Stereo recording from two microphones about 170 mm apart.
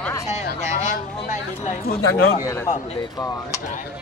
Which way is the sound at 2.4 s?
20° left (ahead or behind).